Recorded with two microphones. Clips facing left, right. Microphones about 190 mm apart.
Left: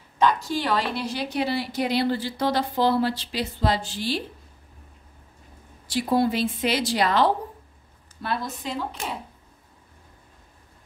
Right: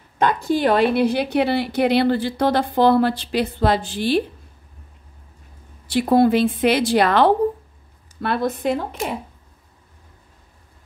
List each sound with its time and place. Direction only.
0.2 s a woman's voice: 55° right (ahead or behind)
5.9 s a woman's voice: 60° right (ahead or behind)